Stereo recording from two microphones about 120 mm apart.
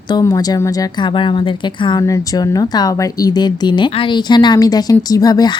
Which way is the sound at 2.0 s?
30° left (ahead or behind).